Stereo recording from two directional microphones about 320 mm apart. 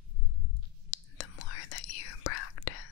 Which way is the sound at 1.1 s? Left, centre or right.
Left.